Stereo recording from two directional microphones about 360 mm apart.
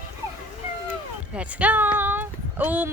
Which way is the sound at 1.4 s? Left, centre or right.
Centre.